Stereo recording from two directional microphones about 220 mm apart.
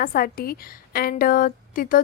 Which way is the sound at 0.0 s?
40° left (ahead or behind).